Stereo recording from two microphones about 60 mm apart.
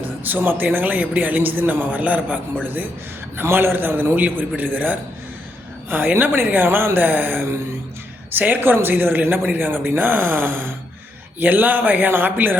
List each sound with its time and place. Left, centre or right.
0.3 s speech: right
3.3 s speech: right